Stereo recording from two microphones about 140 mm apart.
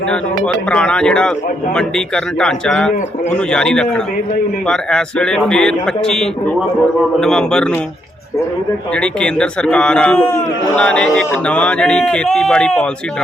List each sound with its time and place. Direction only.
0.4 s a man's voice: 5° left (ahead or behind)
9.0 s speech: 5° left (ahead or behind)